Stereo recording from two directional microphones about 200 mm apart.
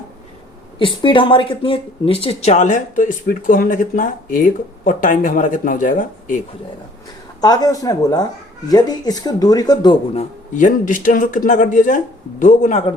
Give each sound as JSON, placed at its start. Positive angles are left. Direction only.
{"t": 0.8, "sound": "speech", "side_deg": 25}
{"t": 7.4, "sound": "speech", "side_deg": 20}
{"t": 10.5, "sound": "speech", "side_deg": 40}